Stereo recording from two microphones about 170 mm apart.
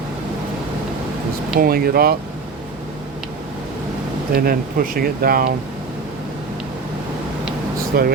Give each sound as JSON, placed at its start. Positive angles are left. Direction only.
{"t": 1.5, "sound": "speech", "side_deg": -60}
{"t": 4.4, "sound": "speech", "side_deg": -60}
{"t": 7.9, "sound": "speech", "side_deg": -60}